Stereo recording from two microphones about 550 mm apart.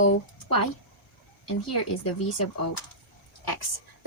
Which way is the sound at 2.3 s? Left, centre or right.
Left.